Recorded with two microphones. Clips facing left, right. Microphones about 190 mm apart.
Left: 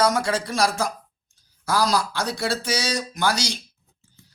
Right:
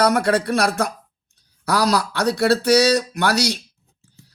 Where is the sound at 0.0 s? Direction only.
60° right (ahead or behind).